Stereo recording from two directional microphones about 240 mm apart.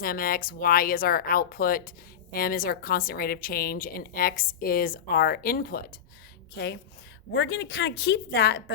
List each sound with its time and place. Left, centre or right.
0.0 s a woman's voice: left